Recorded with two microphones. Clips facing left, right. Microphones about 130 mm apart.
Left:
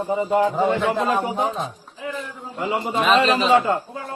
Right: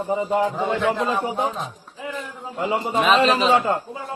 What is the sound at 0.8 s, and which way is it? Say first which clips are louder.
Speech: left 1 dB; 25° left (ahead or behind).